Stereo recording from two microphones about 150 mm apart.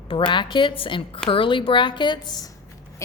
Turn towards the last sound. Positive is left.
turn(degrees=20)  # may be behind; listen again after turning